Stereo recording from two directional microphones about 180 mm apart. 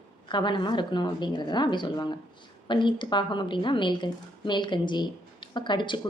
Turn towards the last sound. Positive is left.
turn(degrees=25)  # may be behind; listen again after turning